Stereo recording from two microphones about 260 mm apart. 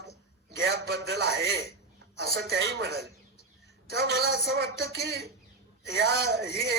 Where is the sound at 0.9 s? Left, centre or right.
Right.